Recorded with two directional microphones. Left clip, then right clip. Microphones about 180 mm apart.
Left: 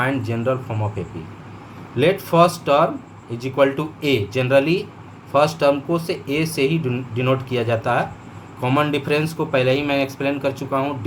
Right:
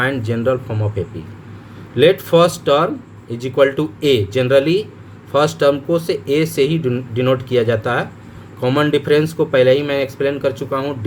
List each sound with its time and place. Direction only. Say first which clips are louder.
0.0 s speech: right 4 dB; 50° right (ahead or behind)